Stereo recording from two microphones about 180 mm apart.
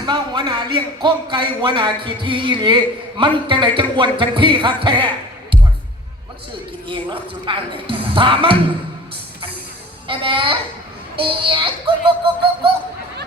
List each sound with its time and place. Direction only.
0.0 s speech: 25° right (ahead or behind)
6.8 s speech: 30° right (ahead or behind)
10.1 s speech: 30° right (ahead or behind)